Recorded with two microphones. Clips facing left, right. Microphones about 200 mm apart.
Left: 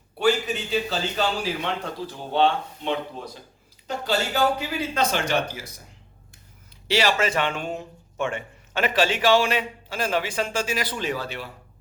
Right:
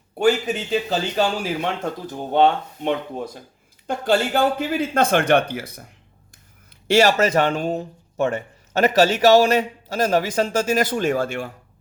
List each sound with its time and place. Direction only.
0.2 s a man's voice: 50° right (ahead or behind)
6.8 s a man's voice: 45° right (ahead or behind)